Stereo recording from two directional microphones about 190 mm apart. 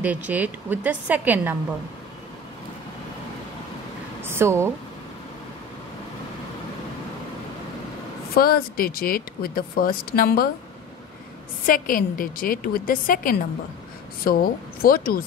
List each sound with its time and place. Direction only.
0.0 s a woman's voice: 10° right (ahead or behind)
4.2 s a sound: 15° right (ahead or behind)
8.4 s speech: 50° left (ahead or behind)
11.6 s speech: 45° left (ahead or behind)